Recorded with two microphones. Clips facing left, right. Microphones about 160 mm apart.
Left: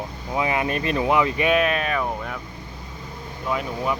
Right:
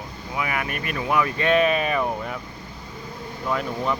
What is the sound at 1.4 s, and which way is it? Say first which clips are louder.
Speech: right 1 dB; 5° left (ahead or behind).